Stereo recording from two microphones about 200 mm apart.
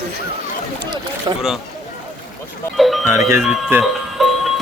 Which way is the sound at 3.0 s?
15° right (ahead or behind).